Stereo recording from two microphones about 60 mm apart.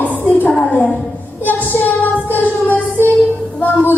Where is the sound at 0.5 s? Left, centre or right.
Left.